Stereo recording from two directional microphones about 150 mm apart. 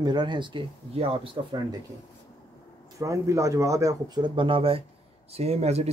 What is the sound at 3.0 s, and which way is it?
Speech, 20° right (ahead or behind).